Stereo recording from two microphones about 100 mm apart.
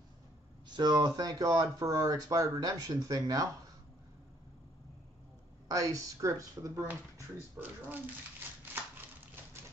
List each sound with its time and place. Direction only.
0.7 s speech: 45° right (ahead or behind)
5.7 s speech: 35° right (ahead or behind); by 8.0 s 20° right (ahead or behind)
8.9 s a sound: 20° right (ahead or behind)